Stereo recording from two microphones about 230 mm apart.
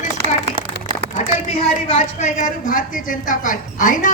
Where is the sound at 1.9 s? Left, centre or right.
Left.